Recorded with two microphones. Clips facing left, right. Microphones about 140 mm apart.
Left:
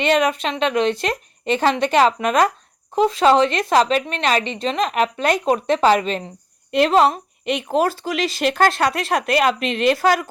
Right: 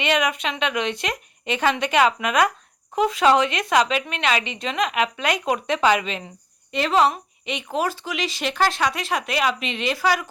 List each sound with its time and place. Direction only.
0.0 s a woman's voice: 35° left (ahead or behind)
6.7 s speech: centre (ahead or behind)
6.9 s a woman's voice: 40° left (ahead or behind)
8.5 s speech: 50° left (ahead or behind)
9.0 s a woman's voice: 40° left (ahead or behind)
9.6 s speech: centre (ahead or behind)
9.9 s speech: 50° left (ahead or behind)